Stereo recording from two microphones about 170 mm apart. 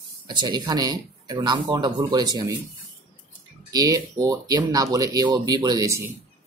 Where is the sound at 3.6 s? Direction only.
20° right (ahead or behind).